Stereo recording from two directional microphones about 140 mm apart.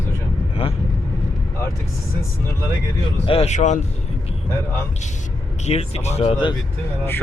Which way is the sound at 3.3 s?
50° left (ahead or behind).